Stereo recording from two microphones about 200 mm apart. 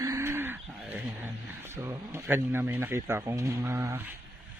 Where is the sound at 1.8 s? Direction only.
10° right (ahead or behind).